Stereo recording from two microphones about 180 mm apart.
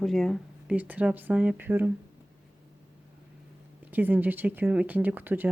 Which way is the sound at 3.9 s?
10° right (ahead or behind).